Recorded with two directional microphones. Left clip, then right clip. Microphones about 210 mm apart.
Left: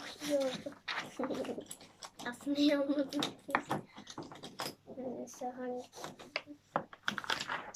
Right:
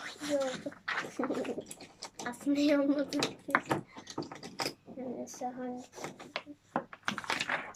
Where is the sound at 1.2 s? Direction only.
15° left (ahead or behind).